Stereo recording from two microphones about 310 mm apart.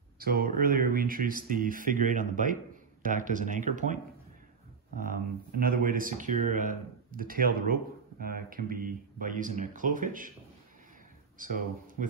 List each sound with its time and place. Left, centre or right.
0.2 s speech: right
11.3 s speech: right